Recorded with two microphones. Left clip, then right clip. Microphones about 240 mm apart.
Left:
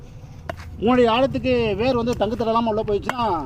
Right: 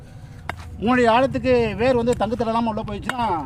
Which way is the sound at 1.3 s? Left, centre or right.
Right.